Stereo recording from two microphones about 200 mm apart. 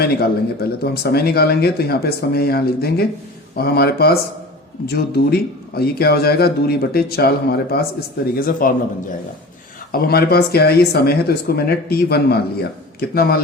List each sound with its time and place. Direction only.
0.0 s speech: 50° left (ahead or behind)
9.9 s speech: 50° left (ahead or behind)